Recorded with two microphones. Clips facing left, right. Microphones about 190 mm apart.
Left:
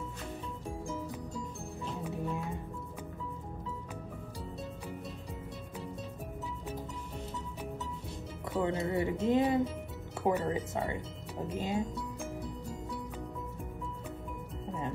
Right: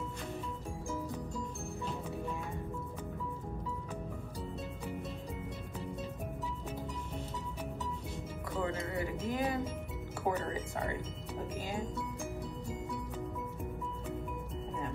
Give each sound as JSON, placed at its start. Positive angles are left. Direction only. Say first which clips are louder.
{"t": 8.6, "sound": "speech", "louder": "left 6 dB", "side_deg": 25}